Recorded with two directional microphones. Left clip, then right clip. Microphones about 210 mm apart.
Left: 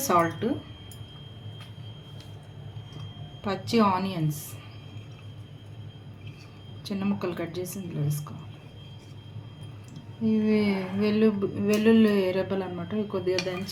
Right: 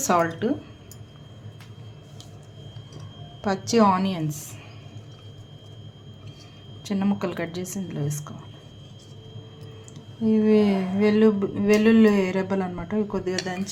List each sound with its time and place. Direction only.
0.0 s speech: 25° right (ahead or behind)
3.4 s a woman's voice: 35° right (ahead or behind)
6.8 s speech: 30° right (ahead or behind)
10.2 s speech: 20° right (ahead or behind)